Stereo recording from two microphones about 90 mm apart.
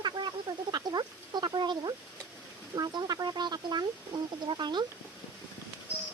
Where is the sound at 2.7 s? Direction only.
45° right (ahead or behind).